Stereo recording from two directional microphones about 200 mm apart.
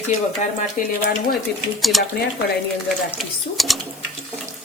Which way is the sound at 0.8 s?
40° left (ahead or behind).